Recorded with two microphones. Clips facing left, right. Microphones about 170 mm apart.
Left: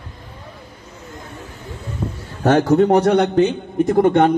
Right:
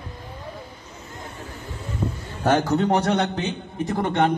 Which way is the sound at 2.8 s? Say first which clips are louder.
Left 7 dB; 55° left (ahead or behind).